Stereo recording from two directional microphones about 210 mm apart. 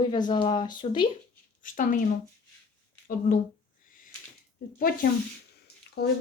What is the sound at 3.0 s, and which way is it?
Speech, 40° left (ahead or behind).